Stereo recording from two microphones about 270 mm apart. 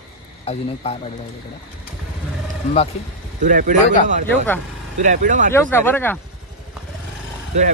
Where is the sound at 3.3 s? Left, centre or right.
Right.